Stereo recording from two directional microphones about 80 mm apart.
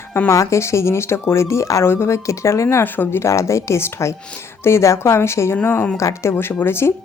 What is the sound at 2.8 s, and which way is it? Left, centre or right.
A woman's voice, left.